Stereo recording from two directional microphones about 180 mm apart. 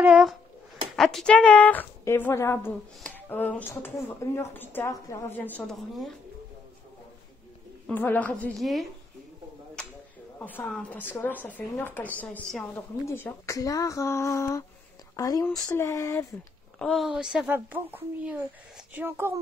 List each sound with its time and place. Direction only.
0.0 s speech: 5° right (ahead or behind)
7.8 s speech: 10° left (ahead or behind)
10.4 s speech: 10° left (ahead or behind)
16.7 s a woman's voice: 5° left (ahead or behind); by 19.3 s 10° right (ahead or behind)